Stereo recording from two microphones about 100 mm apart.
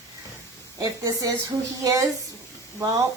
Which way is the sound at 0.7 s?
35° right (ahead or behind).